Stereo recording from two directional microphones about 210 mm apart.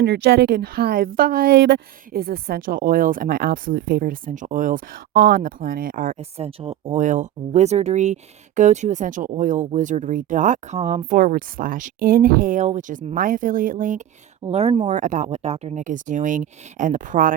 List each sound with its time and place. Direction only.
0.0 s a woman's voice: 50° right (ahead or behind)
14.5 s speech: 30° right (ahead or behind)